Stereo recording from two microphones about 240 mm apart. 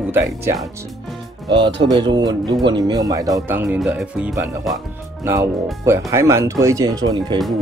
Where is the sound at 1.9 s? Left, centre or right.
Centre.